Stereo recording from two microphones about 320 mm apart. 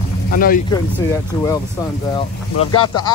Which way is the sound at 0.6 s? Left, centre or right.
Centre.